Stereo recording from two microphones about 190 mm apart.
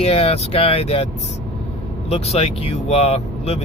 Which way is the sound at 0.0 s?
30° left (ahead or behind).